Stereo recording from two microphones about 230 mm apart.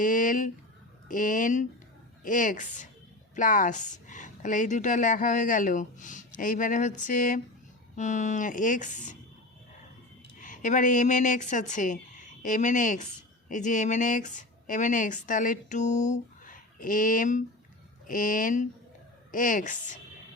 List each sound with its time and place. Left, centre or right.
0.0 s speech: left
10.4 s a woman's voice: left